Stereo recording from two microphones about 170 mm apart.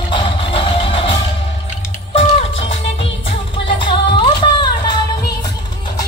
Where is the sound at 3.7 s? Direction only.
30° left (ahead or behind).